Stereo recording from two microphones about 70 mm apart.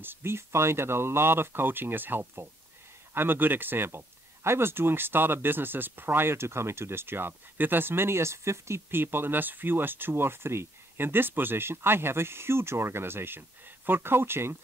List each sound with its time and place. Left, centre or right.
0.0 s speech: right